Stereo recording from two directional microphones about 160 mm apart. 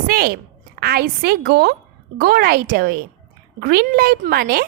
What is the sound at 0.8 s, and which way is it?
Speech, 75° right (ahead or behind).